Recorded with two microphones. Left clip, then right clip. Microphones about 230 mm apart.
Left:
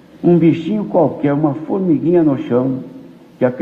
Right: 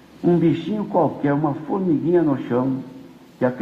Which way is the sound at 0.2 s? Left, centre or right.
Left.